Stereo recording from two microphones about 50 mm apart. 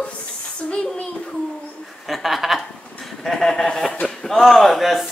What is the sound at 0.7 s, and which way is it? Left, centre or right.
Speech, left.